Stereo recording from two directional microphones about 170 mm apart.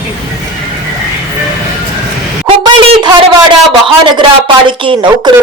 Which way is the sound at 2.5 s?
25° right (ahead or behind).